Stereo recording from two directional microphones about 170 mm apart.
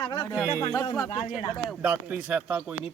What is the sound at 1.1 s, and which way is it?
Speech, 40° left (ahead or behind).